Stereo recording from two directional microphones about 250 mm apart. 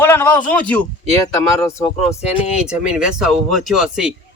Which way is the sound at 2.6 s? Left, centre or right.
Centre.